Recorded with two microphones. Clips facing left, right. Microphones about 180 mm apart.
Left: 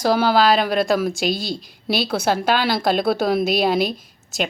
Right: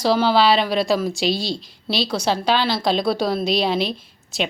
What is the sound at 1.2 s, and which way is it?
A woman's voice, 50° left (ahead or behind).